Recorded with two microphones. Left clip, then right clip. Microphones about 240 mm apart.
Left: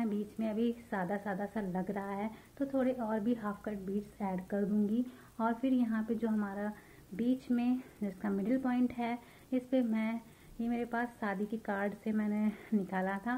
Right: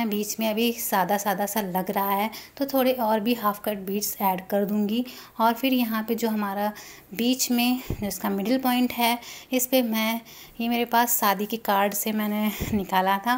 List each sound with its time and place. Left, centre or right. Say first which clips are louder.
0.0 s a woman's voice: right 11 dB; right